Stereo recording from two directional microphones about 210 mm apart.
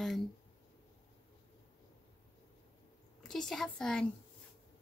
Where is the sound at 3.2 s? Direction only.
Centre (ahead or behind).